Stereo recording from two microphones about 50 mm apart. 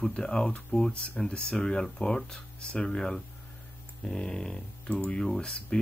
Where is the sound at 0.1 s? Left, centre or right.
Centre.